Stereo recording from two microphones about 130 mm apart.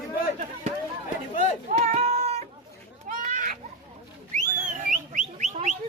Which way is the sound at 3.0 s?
85° right.